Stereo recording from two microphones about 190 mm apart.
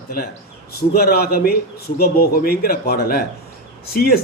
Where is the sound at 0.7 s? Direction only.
55° left (ahead or behind).